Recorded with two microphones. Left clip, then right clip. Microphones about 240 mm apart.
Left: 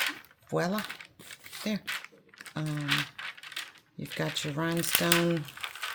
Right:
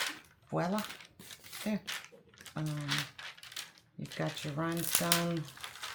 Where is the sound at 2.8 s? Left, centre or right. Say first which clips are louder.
Left 7 dB; centre.